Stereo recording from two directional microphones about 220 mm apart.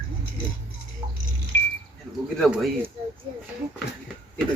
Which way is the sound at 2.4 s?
5° right (ahead or behind).